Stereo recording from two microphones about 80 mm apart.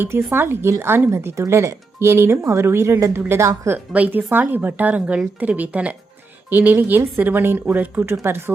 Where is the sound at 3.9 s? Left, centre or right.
Centre.